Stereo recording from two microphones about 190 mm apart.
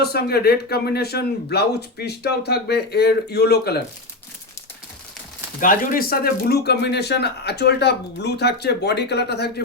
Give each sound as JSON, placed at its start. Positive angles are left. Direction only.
{"t": 0.0, "sound": "speech", "side_deg": 55}
{"t": 5.5, "sound": "speech", "side_deg": 45}